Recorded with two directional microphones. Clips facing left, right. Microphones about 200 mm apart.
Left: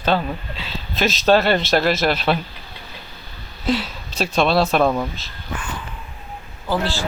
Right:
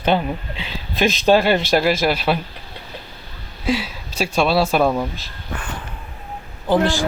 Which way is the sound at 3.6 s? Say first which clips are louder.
Even; 10° right (ahead or behind).